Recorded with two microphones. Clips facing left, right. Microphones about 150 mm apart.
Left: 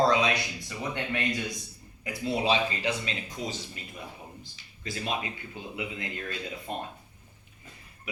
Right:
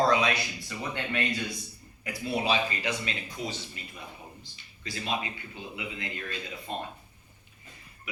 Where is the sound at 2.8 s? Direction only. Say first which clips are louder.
Left 2 dB; 35° left (ahead or behind).